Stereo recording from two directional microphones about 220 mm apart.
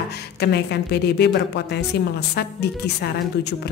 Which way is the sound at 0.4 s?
50° left (ahead or behind).